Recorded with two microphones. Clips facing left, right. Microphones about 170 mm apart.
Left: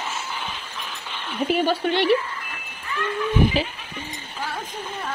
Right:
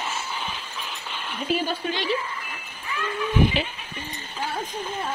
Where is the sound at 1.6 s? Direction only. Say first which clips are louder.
Left 7 dB; 65° left (ahead or behind).